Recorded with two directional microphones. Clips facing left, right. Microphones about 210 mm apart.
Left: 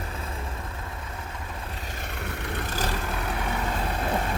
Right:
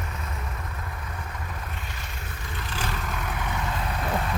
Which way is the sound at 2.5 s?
50° left (ahead or behind).